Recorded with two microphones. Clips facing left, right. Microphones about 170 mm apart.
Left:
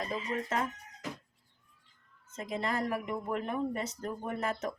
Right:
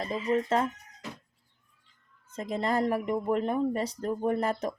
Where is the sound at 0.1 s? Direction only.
25° right (ahead or behind).